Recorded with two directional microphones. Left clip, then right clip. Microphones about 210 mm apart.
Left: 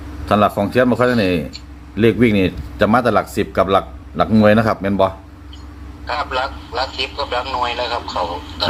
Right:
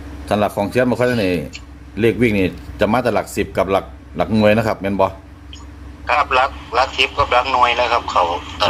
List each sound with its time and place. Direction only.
0.3 s speech: centre (ahead or behind)
6.1 s a man's voice: 35° right (ahead or behind)